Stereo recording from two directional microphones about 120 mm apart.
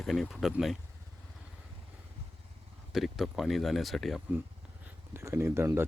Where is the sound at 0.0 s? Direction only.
Centre (ahead or behind).